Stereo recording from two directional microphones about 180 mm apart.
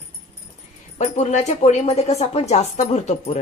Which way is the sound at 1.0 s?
40° left (ahead or behind).